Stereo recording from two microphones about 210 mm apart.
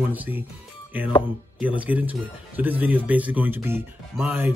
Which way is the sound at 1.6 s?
5° right (ahead or behind).